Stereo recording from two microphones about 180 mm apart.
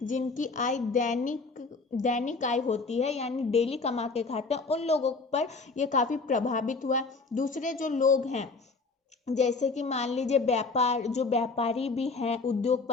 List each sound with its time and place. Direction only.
0.1 s a woman's voice: 45° left (ahead or behind)